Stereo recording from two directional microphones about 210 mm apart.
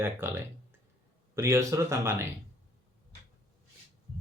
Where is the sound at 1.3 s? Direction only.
15° right (ahead or behind).